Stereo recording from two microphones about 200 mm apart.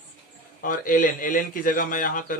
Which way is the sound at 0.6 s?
45° left (ahead or behind).